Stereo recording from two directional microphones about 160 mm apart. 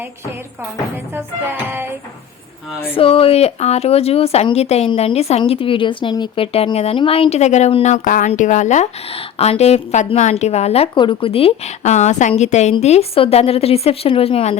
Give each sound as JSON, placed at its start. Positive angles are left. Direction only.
{"t": 1.1, "sound": "music", "side_deg": -15}
{"t": 2.9, "sound": "a woman's voice", "side_deg": 35}